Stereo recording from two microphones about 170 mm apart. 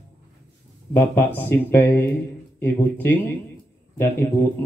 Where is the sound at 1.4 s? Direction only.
10° left (ahead or behind).